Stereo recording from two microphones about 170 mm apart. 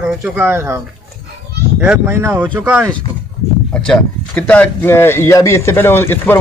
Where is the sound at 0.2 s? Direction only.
10° right (ahead or behind).